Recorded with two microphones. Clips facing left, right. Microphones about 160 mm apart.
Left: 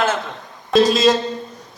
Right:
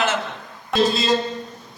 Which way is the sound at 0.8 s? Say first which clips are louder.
Left 5 dB; 90° left.